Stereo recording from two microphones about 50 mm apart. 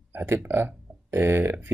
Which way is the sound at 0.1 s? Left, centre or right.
Right.